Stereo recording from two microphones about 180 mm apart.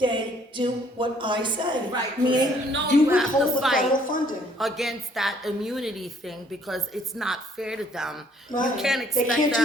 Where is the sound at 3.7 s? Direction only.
50° left (ahead or behind).